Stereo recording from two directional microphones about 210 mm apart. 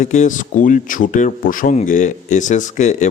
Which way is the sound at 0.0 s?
35° left (ahead or behind).